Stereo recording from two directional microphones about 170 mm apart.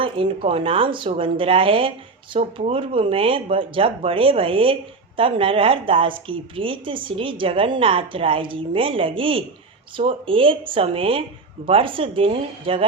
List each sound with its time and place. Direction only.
0.0 s speech: 30° right (ahead or behind)